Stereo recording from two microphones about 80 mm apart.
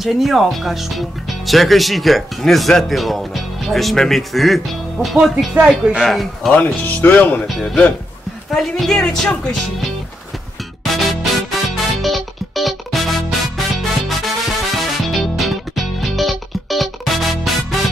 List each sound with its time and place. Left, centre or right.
0.0 s speech: centre
6.5 s speech: centre
10.8 s music: centre